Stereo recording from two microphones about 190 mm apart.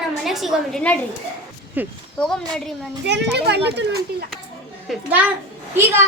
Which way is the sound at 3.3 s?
60° right (ahead or behind).